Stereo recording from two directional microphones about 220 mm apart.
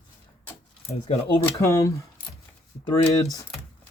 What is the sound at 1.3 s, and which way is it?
Speech, 10° left (ahead or behind).